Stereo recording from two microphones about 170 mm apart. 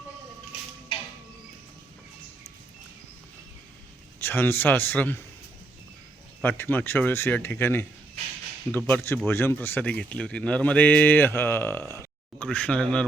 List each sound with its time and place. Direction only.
0.9 s music: 30° left (ahead or behind)
4.2 s speech: 10° left (ahead or behind)
6.4 s speech: 10° left (ahead or behind)